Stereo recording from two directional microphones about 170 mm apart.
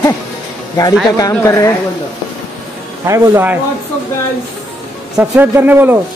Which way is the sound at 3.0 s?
15° right (ahead or behind).